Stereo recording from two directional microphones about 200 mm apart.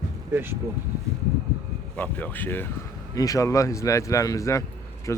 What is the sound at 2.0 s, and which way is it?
Speech, 10° left (ahead or behind).